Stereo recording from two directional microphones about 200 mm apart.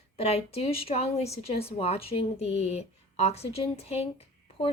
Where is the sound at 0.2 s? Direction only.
30° left (ahead or behind).